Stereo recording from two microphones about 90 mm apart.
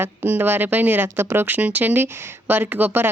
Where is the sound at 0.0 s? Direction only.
20° right (ahead or behind).